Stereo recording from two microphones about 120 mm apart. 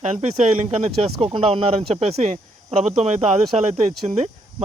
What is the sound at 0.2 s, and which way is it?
Speech, 60° right (ahead or behind).